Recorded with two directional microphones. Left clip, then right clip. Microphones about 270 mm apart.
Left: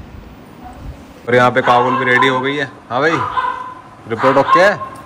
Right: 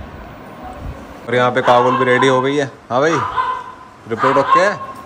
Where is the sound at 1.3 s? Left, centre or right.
Centre.